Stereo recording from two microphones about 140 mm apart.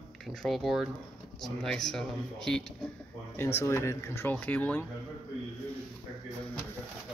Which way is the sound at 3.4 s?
20° left (ahead or behind).